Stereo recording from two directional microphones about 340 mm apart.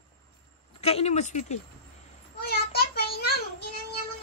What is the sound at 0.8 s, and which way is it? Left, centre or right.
Speech, centre.